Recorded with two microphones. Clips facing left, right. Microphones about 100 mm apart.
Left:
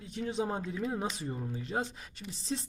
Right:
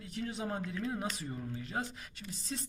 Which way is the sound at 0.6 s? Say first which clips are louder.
Left 3 dB; 15° left (ahead or behind).